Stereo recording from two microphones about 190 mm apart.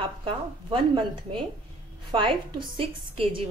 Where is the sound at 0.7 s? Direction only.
25° right (ahead or behind).